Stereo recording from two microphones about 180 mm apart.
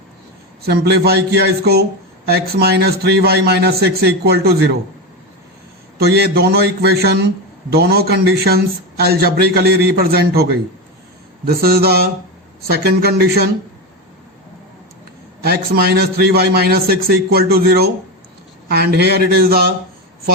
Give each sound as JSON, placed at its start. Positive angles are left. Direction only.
{"t": 0.6, "sound": "a man's voice", "side_deg": -60}
{"t": 6.0, "sound": "a man's voice", "side_deg": -60}
{"t": 15.4, "sound": "a man's voice", "side_deg": -60}